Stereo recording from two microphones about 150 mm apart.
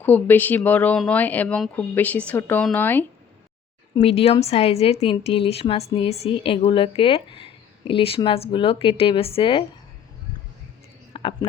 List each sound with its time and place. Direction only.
0.0 s speech: 10° left (ahead or behind)
3.9 s a woman's voice: 40° left (ahead or behind)
11.1 s a sound: 35° left (ahead or behind)